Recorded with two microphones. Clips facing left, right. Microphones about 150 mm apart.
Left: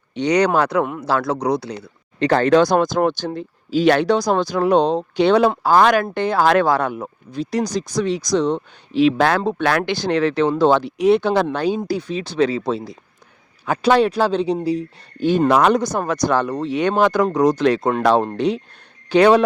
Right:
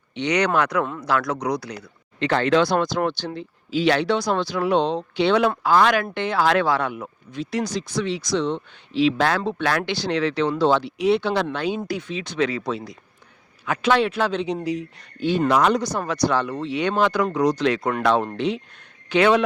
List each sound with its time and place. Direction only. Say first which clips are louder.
0.1 s speech: left 5 dB; 35° left (ahead or behind)
2.1 s speech: left 5 dB; 40° left (ahead or behind)
9.4 s speech: left 4 dB; 45° left (ahead or behind)
9.6 s speech: left 4 dB; 55° left (ahead or behind); by 15.3 s 35° left (ahead or behind)
15.3 s speech: left 4 dB; 50° left (ahead or behind)
17.7 s speech: left 5 dB; 25° left (ahead or behind)
18.0 s speech: left 3 dB; 35° left (ahead or behind)